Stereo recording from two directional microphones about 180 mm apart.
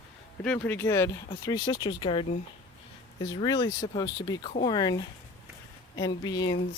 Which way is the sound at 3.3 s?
20° left (ahead or behind).